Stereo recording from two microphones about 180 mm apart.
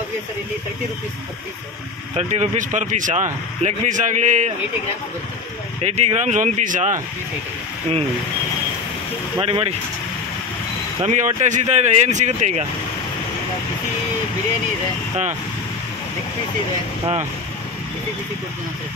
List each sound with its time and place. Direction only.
2.1 s a man's voice: 40° right (ahead or behind)
5.8 s speech: 35° right (ahead or behind)
9.4 s speech: 30° right (ahead or behind)
11.0 s speech: 40° right (ahead or behind)